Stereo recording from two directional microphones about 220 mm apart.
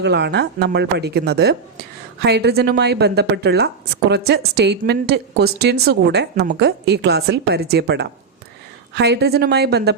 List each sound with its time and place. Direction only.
0.0 s a woman's voice: 50° right (ahead or behind)